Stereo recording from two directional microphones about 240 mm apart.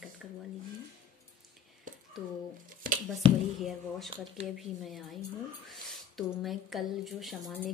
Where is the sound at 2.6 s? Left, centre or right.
Right.